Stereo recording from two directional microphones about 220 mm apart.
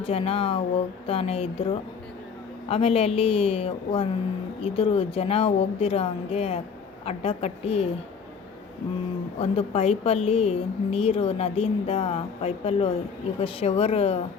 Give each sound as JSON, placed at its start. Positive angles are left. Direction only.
{"t": 0.0, "sound": "a woman's voice", "side_deg": 25}
{"t": 9.4, "sound": "a woman's voice", "side_deg": 25}